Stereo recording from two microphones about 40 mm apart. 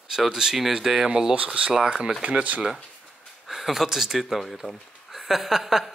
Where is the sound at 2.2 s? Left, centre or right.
Right.